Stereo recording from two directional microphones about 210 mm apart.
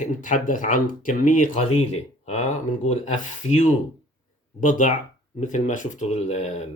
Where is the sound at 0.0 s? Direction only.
35° left (ahead or behind).